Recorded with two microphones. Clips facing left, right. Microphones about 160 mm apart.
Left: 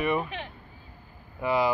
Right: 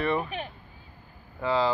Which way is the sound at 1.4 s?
15° left (ahead or behind).